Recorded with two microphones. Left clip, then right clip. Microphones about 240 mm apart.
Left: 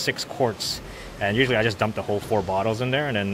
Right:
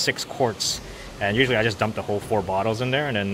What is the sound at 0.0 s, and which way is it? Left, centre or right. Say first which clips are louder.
Speech: right 1 dB; centre.